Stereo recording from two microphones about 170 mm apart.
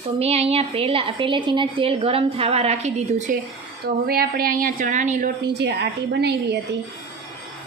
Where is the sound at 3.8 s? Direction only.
65° right (ahead or behind); by 5.3 s 45° right (ahead or behind).